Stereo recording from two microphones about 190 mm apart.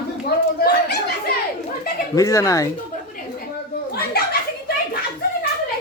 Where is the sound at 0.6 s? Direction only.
55° left (ahead or behind).